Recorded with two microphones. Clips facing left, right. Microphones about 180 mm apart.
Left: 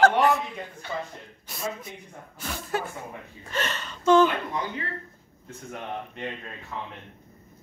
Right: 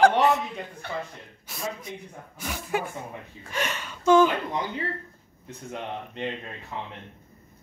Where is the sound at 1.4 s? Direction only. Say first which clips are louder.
Left 1 dB; centre (ahead or behind).